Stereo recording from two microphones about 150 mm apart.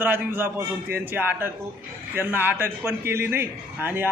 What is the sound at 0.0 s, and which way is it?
A man's voice, 15° right (ahead or behind).